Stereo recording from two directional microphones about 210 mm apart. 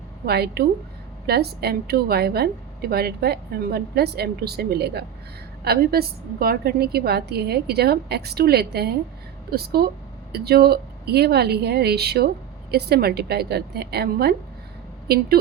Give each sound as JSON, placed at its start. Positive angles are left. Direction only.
{"t": 0.3, "sound": "a woman's voice", "side_deg": -50}